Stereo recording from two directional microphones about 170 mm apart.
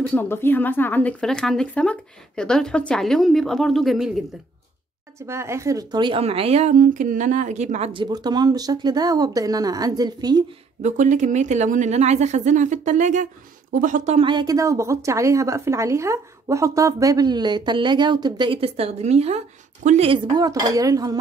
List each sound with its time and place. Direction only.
0.1 s speech: 15° left (ahead or behind)
5.2 s a woman's voice: 15° right (ahead or behind); by 7.9 s 45° right (ahead or behind)
7.9 s speech: 25° right (ahead or behind)
10.8 s a woman's voice: 45° right (ahead or behind)
14.2 s speech: 25° right (ahead or behind); by 20.1 s 40° right (ahead or behind)
20.1 s speech: 25° right (ahead or behind)